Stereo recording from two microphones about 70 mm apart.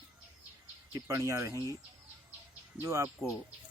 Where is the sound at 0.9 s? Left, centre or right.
Right.